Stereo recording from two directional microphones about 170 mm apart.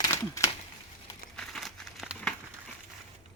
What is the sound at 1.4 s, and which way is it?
Crumpling, centre (ahead or behind).